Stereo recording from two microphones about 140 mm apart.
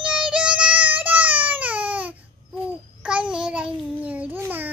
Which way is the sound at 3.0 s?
5° right (ahead or behind).